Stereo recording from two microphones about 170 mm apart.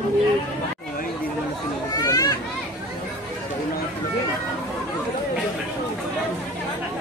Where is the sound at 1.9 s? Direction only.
20° left (ahead or behind).